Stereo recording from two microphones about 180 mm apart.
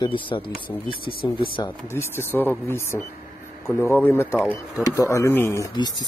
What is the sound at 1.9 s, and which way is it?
Speech, 15° left (ahead or behind).